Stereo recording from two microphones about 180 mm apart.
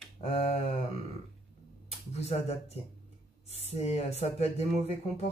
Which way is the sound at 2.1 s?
35° left (ahead or behind).